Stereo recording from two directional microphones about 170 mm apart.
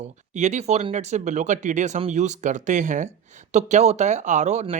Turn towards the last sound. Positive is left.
turn(degrees=-40)  # may be behind; listen again after turning